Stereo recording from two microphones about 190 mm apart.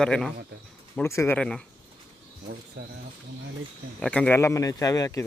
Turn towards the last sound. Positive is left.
turn(degrees=15)  # may be behind; listen again after turning